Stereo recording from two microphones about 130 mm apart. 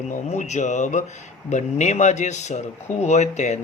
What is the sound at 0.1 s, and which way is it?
Speech, 65° left (ahead or behind).